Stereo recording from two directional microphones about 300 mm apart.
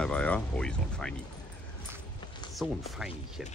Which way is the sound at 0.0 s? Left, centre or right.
Centre.